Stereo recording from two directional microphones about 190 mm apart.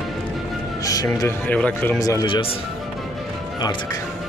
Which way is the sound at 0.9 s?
20° left (ahead or behind).